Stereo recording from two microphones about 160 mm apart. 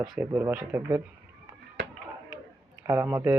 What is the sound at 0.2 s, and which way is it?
Speech, 15° right (ahead or behind).